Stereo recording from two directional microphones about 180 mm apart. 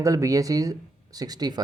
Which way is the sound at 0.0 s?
20° right (ahead or behind).